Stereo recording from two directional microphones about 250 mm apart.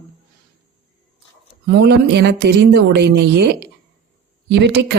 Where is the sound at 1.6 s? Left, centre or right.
Right.